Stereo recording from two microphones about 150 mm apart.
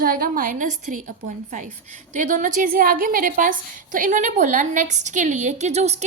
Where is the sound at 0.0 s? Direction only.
70° right (ahead or behind).